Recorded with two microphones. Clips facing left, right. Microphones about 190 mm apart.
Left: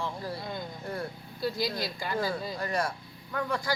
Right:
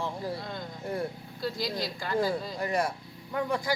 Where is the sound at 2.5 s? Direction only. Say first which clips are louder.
Right 2 dB; 20° right (ahead or behind).